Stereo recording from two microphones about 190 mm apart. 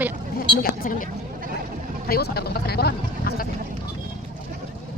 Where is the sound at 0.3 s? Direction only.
50° left (ahead or behind).